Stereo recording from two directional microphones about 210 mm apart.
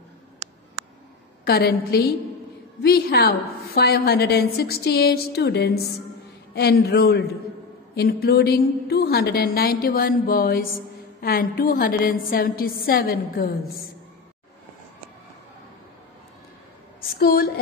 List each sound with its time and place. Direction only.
0.4 s a sound: 15° right (ahead or behind)
1.4 s a woman's voice: 50° left (ahead or behind)
17.2 s a woman's voice: 45° left (ahead or behind)